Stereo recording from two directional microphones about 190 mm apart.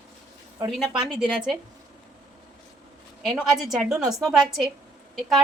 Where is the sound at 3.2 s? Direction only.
Centre (ahead or behind).